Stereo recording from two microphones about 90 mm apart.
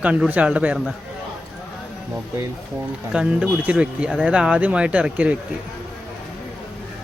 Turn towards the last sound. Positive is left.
turn(degrees=-15)  # may be behind; listen again after turning